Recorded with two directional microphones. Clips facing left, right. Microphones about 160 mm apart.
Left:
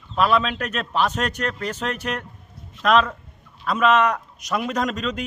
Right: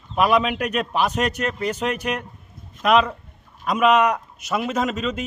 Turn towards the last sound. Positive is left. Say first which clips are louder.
# right 1 dB
turn(degrees=-5)  # may be behind; listen again after turning